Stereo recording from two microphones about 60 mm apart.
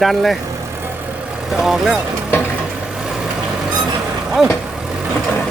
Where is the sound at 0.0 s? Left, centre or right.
Centre.